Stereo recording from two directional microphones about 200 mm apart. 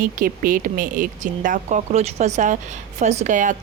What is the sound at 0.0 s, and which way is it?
Speech, 45° right (ahead or behind).